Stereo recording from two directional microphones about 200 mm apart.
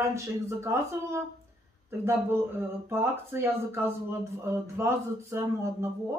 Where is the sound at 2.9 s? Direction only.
10° right (ahead or behind).